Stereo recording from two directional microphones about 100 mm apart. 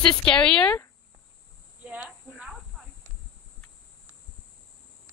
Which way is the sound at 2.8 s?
5° left (ahead or behind).